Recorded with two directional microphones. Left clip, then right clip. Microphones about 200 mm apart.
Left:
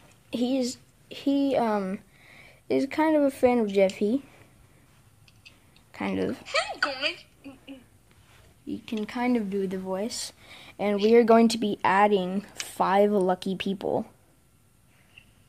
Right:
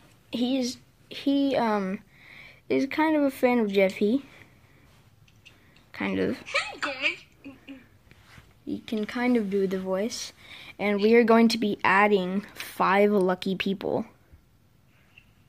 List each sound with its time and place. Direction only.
0.3 s speech: 5° left (ahead or behind)
5.9 s speech: centre (ahead or behind)
6.4 s a sound: 25° left (ahead or behind)
8.6 s speech: 10° right (ahead or behind)
10.1 s a sound: 10° left (ahead or behind)
11.1 s speech: centre (ahead or behind)